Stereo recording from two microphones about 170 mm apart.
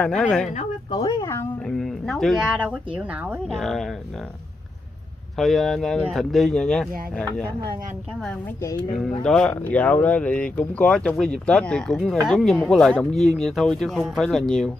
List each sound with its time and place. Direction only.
0.0 s speech: 5° left (ahead or behind)
0.9 s speech: 20° left (ahead or behind)
1.7 s speech: centre (ahead or behind)
5.4 s speech: centre (ahead or behind)
9.2 s speech: 5° left (ahead or behind)